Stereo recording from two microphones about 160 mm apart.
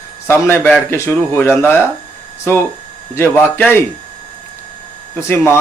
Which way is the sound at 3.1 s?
15° left (ahead or behind).